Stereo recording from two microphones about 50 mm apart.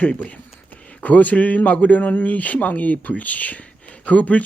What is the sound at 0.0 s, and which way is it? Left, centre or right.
Speech, left.